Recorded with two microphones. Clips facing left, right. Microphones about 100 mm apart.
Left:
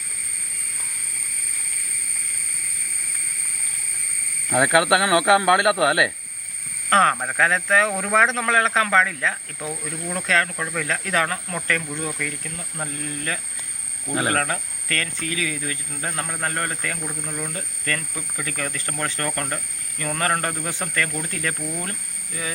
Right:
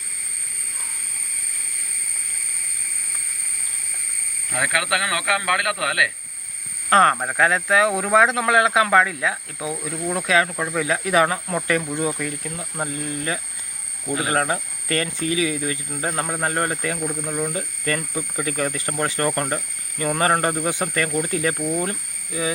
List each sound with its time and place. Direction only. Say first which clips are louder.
4.4 s speech: left 6 dB; 30° left (ahead or behind)
6.9 s speech: right 2 dB; 5° right (ahead or behind)